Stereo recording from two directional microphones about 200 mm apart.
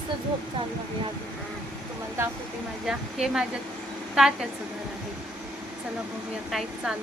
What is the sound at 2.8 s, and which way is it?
Speech, 5° right (ahead or behind).